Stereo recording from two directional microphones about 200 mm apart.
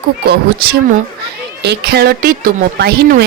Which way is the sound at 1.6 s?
55° right (ahead or behind).